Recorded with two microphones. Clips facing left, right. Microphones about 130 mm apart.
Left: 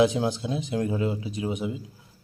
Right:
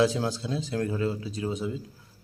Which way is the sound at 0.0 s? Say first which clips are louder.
Left 3 dB; 20° left (ahead or behind).